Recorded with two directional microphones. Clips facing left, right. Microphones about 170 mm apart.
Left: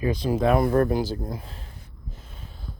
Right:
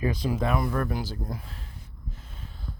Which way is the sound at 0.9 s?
25° left (ahead or behind).